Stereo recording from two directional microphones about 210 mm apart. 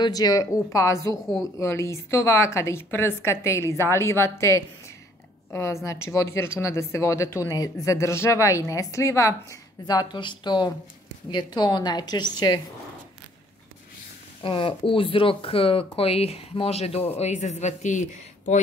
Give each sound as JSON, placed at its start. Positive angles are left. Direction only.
{"t": 0.0, "sound": "speech", "side_deg": 20}
{"t": 1.2, "sound": "speech", "side_deg": 0}
{"t": 1.6, "sound": "speech", "side_deg": 15}
{"t": 14.4, "sound": "speech", "side_deg": 25}